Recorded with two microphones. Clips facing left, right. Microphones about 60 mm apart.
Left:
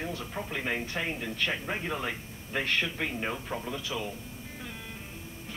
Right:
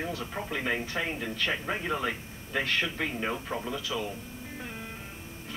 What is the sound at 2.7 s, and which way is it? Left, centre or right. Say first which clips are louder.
Speech: right 1 dB; right.